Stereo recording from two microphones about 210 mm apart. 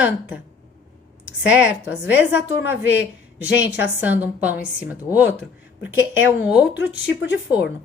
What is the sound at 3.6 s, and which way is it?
Speech, 55° left (ahead or behind).